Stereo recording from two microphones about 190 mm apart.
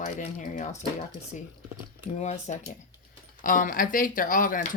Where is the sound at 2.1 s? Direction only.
40° left (ahead or behind).